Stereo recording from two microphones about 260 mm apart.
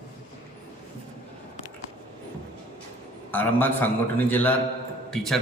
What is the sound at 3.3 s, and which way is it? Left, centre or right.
A man's voice, centre.